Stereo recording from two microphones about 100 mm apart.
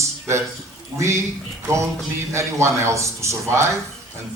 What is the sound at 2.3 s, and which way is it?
A man's voice, 30° right (ahead or behind).